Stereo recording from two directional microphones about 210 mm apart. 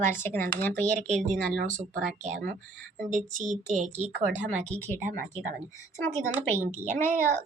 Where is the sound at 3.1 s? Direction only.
35° right (ahead or behind).